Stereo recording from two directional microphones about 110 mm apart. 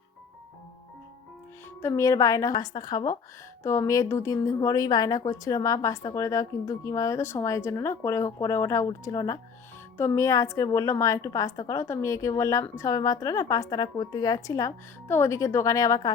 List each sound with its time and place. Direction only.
1.8 s a woman's voice: 30° left (ahead or behind)